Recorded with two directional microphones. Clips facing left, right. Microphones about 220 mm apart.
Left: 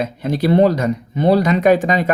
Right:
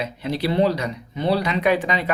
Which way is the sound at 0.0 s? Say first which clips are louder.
Left 6 dB; 45° left (ahead or behind).